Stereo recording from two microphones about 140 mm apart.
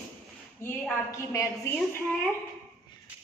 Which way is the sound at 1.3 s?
20° left (ahead or behind).